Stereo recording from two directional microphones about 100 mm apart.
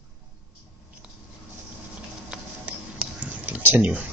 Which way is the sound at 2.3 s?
10° right (ahead or behind).